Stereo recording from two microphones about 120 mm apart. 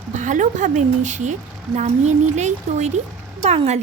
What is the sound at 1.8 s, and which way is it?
Speech, 70° right (ahead or behind).